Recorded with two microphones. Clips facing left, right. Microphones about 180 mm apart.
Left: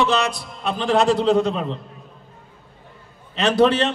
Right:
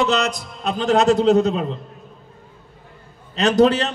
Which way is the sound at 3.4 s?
40° right (ahead or behind).